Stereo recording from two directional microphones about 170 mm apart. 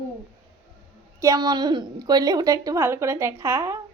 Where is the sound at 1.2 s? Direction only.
20° right (ahead or behind).